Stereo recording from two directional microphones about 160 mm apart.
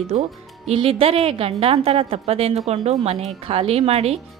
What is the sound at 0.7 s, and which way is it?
Speech, 35° right (ahead or behind).